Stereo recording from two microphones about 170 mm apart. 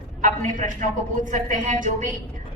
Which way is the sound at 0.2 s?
50° right (ahead or behind).